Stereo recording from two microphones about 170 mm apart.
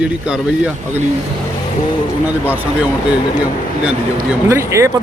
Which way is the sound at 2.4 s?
10° right (ahead or behind).